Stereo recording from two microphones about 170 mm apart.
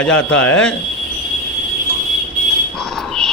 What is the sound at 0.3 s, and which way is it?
Speech, 5° left (ahead or behind).